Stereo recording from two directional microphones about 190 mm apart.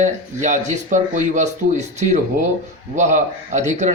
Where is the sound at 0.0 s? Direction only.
40° right (ahead or behind).